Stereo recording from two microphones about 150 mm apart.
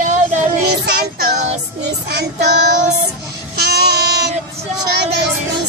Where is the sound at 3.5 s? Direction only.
90° right.